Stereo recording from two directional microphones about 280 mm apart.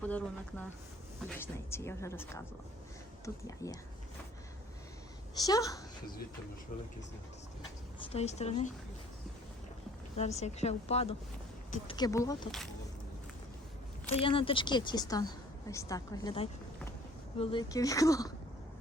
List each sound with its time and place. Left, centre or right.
0.0 s a sound: centre
1.4 s a woman's voice: centre
5.5 s a woman's voice: centre
8.1 s a woman's voice: left
10.2 s a woman's voice: left
14.1 s a woman's voice: centre